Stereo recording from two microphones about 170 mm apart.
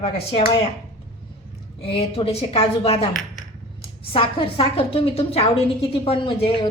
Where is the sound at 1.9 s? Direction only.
35° left (ahead or behind).